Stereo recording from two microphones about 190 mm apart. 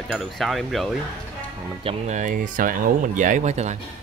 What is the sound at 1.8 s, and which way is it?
Speech, 35° right (ahead or behind).